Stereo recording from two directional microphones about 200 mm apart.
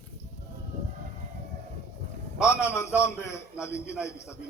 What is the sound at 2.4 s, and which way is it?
A man's voice, 15° left (ahead or behind).